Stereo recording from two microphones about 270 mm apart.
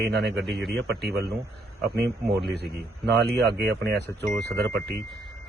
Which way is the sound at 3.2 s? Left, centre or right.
Right.